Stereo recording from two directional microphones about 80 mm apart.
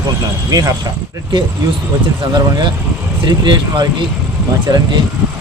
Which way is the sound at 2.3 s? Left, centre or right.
Right.